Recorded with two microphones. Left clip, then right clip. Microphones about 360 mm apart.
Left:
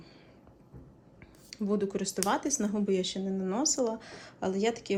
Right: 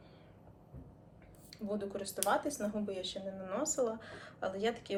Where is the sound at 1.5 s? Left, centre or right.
Left.